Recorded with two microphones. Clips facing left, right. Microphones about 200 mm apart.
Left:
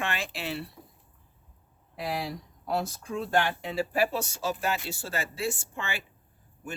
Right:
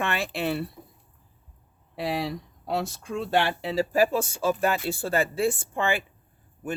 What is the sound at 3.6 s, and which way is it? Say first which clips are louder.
Speech: right 5 dB; 40° right (ahead or behind).